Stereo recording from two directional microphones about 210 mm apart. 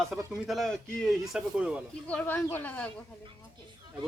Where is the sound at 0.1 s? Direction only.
Centre (ahead or behind).